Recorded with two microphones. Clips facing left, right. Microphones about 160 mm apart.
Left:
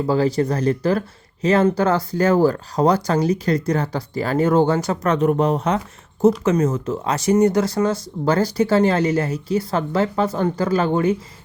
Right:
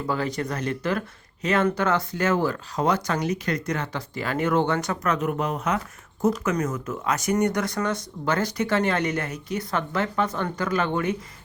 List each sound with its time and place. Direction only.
0.1 s speech: 30° left (ahead or behind)